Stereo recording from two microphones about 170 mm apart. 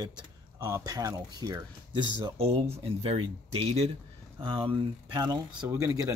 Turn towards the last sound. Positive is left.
turn(degrees=-20)  # may be behind; listen again after turning